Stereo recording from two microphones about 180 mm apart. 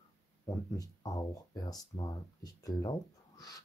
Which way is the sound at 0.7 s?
20° left (ahead or behind).